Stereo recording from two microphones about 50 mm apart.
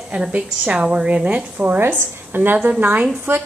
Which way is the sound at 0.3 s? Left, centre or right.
Right.